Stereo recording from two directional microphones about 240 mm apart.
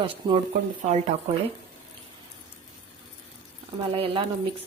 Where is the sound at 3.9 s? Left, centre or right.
Right.